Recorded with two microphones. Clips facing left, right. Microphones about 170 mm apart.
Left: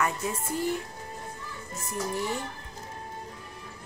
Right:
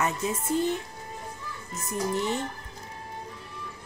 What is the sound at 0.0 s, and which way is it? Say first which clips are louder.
Speech: right 1 dB; 20° right (ahead or behind).